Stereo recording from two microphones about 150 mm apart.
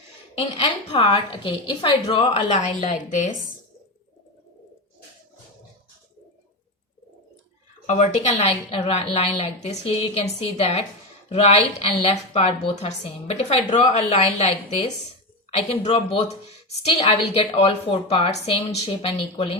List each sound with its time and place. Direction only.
0.3 s a woman's voice: 40° left (ahead or behind)
3.1 s speech: 55° left (ahead or behind)
7.9 s a woman's voice: 50° left (ahead or behind)